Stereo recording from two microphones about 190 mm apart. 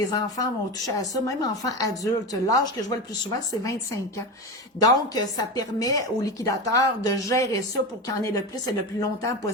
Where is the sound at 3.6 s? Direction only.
15° left (ahead or behind).